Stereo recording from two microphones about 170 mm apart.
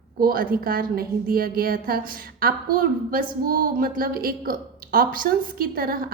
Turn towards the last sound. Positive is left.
turn(degrees=-60)  # may be behind; listen again after turning